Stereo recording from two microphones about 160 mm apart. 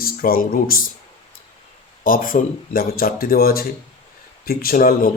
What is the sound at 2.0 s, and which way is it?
Speech, 60° left (ahead or behind).